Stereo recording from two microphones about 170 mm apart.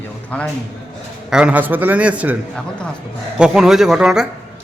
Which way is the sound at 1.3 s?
5° right (ahead or behind).